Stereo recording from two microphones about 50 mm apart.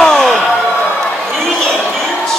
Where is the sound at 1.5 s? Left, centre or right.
Centre.